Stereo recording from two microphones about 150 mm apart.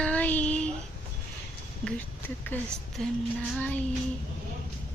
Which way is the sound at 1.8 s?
10° left (ahead or behind).